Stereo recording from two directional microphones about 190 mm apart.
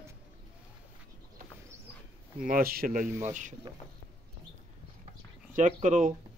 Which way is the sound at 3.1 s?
15° right (ahead or behind).